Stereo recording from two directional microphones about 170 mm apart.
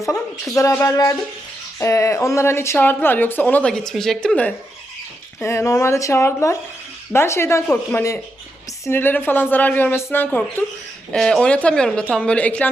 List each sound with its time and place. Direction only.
0.5 s speech: 15° left (ahead or behind)